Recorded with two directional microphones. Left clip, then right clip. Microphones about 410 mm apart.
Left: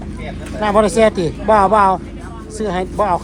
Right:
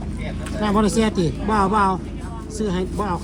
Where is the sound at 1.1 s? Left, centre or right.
Centre.